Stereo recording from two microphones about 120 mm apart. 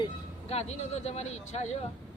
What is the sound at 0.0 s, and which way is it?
Speech, 55° left (ahead or behind).